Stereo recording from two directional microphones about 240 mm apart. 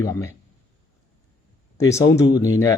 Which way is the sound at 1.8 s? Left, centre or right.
Centre.